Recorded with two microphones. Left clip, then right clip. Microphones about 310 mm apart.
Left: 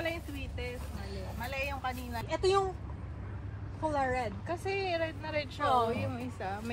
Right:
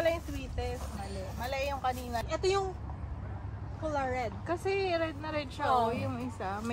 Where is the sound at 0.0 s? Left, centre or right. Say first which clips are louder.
Right 6 dB; right.